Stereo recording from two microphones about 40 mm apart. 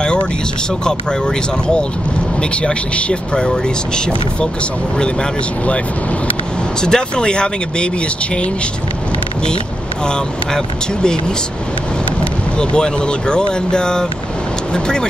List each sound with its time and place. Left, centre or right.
0.8 s speech: left
6.8 s speech: left
10.0 s speech: left
12.5 s speech: left